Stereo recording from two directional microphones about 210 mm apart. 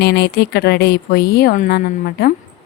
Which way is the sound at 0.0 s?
50° left (ahead or behind).